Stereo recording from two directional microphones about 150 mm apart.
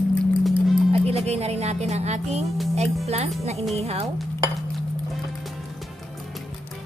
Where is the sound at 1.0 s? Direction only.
45° right (ahead or behind).